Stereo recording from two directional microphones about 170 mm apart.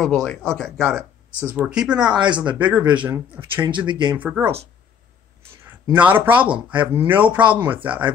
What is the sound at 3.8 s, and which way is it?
Speech, 25° right (ahead or behind).